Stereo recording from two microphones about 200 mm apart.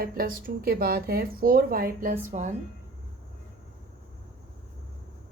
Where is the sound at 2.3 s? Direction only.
35° right (ahead or behind).